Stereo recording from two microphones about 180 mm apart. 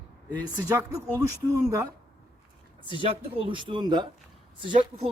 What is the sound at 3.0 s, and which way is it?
Speech, 30° right (ahead or behind).